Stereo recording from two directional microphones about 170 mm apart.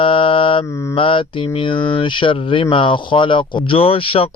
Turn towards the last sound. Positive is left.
turn(degrees=30)  # may be behind; listen again after turning